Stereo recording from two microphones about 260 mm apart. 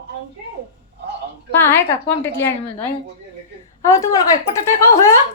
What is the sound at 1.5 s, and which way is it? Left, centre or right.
A woman's voice, centre.